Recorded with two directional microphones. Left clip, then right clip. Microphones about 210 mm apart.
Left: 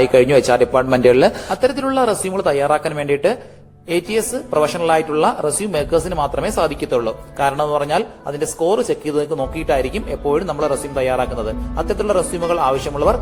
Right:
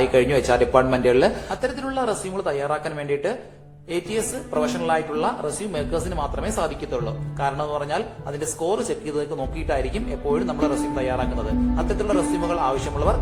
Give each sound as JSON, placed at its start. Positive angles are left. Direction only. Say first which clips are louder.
{"t": 0.0, "sound": "a man's voice", "louder": "left 7 dB", "side_deg": 25}